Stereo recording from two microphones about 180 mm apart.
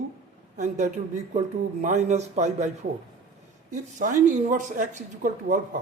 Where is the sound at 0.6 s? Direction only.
40° right (ahead or behind).